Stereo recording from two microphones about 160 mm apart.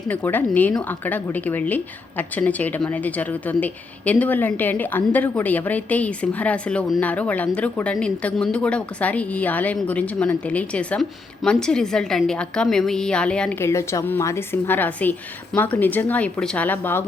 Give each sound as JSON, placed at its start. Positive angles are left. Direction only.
{"t": 0.1, "sound": "a woman's voice", "side_deg": 10}